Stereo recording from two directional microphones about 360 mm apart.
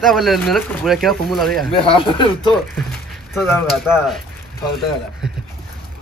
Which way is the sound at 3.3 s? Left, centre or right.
Centre.